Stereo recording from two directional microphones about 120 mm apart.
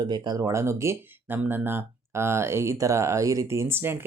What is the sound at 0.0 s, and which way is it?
Speech, 35° right (ahead or behind).